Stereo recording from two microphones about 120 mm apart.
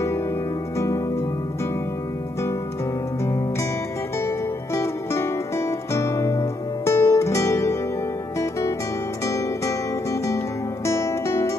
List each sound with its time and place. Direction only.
0.7 s music: 25° left (ahead or behind)
4.7 s music: 25° left (ahead or behind)
10.9 s music: 25° left (ahead or behind)